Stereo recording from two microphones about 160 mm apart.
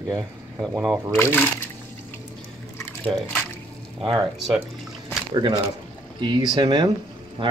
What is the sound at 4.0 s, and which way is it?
Speech, 30° right (ahead or behind).